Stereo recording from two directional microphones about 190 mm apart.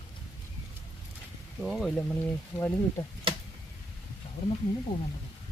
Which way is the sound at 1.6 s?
Centre (ahead or behind).